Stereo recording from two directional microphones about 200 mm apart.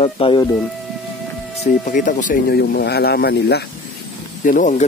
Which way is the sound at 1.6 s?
40° left (ahead or behind).